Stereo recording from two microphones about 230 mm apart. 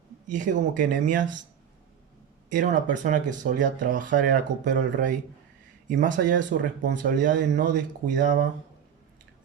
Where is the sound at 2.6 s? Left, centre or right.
Right.